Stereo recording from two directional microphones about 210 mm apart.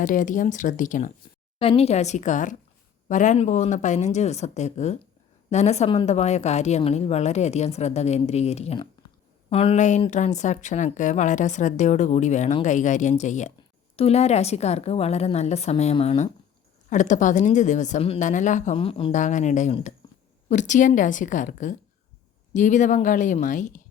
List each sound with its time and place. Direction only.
0.0 s speech: 40° left (ahead or behind)
1.5 s speech: 25° left (ahead or behind)